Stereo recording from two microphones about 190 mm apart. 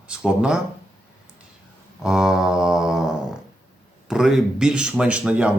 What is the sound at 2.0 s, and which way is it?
Music, 5° right (ahead or behind).